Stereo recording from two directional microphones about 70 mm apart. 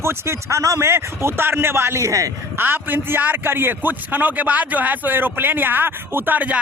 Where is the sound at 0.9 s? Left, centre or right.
Right.